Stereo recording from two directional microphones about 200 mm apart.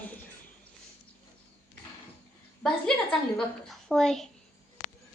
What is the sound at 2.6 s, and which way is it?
A woman's voice, 5° left (ahead or behind).